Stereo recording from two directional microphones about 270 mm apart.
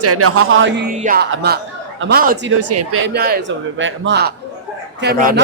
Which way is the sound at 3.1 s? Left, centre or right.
Right.